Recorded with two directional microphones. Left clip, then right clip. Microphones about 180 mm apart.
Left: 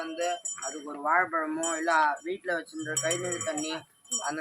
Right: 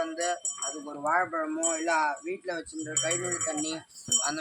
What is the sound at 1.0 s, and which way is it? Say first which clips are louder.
Speech: left 1 dB; 65° right (ahead or behind).